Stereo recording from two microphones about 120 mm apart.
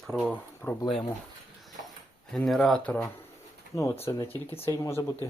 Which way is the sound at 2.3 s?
Centre (ahead or behind).